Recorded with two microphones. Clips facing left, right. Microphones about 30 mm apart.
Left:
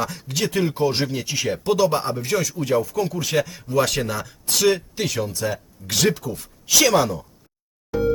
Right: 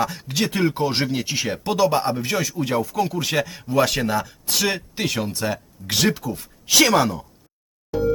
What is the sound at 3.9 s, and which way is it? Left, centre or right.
Speech, right.